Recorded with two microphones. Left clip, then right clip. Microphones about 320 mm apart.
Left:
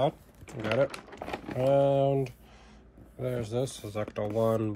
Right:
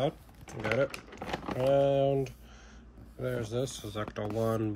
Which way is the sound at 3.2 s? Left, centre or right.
Centre.